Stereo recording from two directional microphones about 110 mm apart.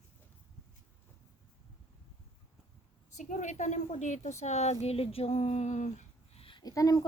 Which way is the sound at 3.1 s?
90° left.